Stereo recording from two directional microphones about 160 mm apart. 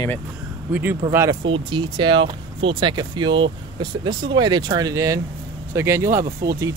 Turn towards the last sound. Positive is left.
turn(degrees=-20)  # may be behind; listen again after turning